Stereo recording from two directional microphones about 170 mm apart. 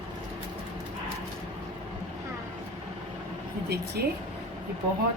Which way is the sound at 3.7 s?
70° right (ahead or behind).